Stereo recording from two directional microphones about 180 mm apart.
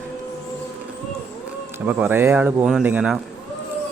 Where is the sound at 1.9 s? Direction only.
10° right (ahead or behind).